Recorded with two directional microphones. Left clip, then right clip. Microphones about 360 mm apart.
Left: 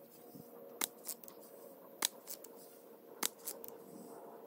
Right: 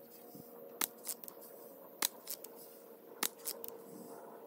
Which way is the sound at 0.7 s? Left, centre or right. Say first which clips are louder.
Right 1 dB; centre.